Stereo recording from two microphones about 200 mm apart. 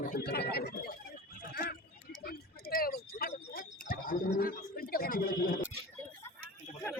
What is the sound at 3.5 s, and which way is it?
Bird, 45° left (ahead or behind).